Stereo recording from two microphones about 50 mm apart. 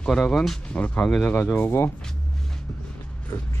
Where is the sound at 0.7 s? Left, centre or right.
Left.